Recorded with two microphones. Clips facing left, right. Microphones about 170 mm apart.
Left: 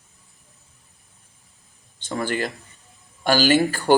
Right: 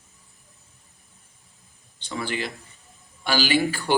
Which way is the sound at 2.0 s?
45° left (ahead or behind).